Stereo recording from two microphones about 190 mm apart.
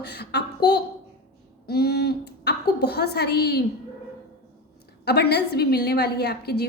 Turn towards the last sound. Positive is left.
turn(degrees=60)  # may be behind; listen again after turning